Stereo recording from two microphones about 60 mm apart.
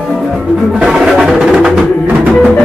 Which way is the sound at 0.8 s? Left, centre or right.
Centre.